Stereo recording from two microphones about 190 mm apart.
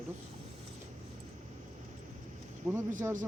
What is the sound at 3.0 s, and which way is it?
Speech, 15° right (ahead or behind).